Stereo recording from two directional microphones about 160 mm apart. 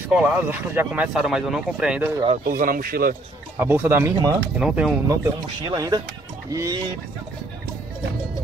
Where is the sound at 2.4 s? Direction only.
60° right (ahead or behind).